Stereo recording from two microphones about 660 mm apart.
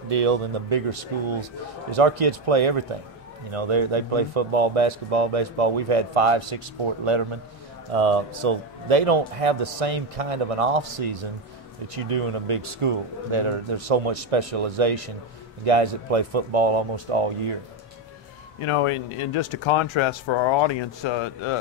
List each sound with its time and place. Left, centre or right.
0.1 s speech: right
7.9 s speech: right
11.9 s speech: right
18.6 s speech: left